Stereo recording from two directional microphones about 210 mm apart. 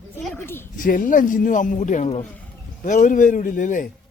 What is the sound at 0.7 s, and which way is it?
Speech, 40° left (ahead or behind).